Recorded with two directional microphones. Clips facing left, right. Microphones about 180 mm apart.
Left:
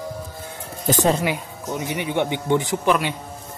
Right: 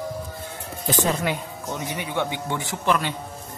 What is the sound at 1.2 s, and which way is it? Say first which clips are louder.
Speech: left 2 dB; 15° left (ahead or behind).